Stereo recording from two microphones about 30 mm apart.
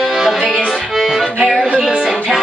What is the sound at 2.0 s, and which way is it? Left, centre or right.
Music, centre.